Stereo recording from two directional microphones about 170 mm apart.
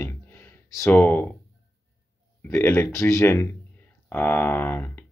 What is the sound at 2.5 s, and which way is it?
Speech, 10° left (ahead or behind).